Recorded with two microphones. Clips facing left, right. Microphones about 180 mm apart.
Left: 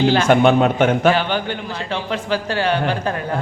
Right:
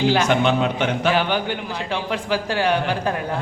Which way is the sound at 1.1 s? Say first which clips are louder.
Even; 10° right (ahead or behind).